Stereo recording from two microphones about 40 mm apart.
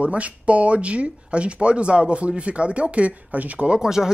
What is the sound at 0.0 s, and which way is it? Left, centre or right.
Speech, right.